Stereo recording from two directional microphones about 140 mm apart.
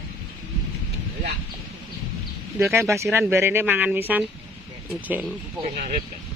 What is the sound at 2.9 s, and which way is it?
Speech, 20° right (ahead or behind).